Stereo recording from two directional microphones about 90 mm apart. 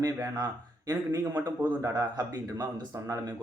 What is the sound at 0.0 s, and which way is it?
Speech, 40° right (ahead or behind).